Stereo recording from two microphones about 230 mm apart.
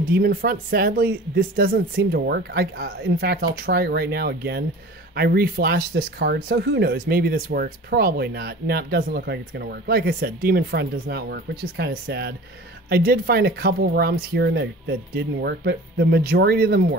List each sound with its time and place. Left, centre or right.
0.1 s speech: right